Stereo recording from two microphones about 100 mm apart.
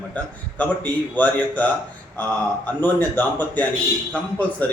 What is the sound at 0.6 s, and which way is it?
A man's voice, 15° left (ahead or behind).